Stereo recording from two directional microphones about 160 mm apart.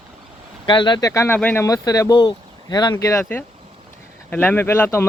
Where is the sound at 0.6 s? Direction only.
30° left (ahead or behind).